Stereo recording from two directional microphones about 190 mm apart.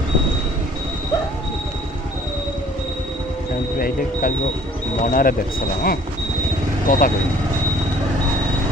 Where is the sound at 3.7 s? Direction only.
50° left (ahead or behind).